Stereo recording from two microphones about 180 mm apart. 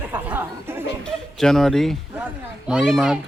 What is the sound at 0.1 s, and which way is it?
Chatter, 10° right (ahead or behind).